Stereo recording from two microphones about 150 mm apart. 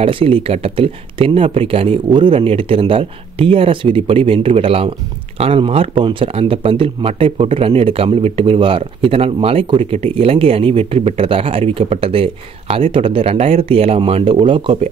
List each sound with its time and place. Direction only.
0.0 s speech: 35° right (ahead or behind)